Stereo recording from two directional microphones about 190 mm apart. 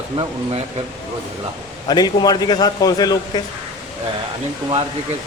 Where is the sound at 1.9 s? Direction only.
20° left (ahead or behind).